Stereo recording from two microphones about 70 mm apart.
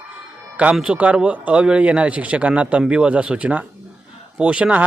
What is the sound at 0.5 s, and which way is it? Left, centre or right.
A man's voice, centre.